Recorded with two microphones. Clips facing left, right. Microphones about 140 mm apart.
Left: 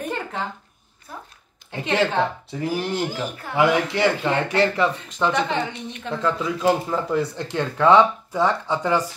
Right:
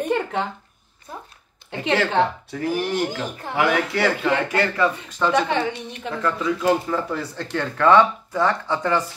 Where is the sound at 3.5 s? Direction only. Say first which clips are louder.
Left 2 dB; 25° left (ahead or behind).